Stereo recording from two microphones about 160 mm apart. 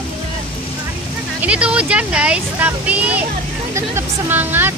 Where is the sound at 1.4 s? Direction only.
5° right (ahead or behind).